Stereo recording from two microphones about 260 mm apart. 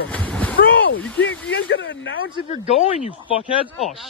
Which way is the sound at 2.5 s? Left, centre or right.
Left.